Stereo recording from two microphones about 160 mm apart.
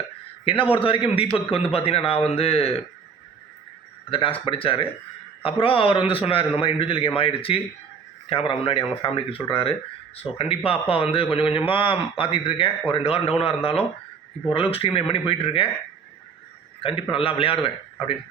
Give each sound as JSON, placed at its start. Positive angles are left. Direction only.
{"t": 0.9, "sound": "a man's voice", "side_deg": 35}
{"t": 4.1, "sound": "a man's voice", "side_deg": 35}
{"t": 16.8, "sound": "a man's voice", "side_deg": 35}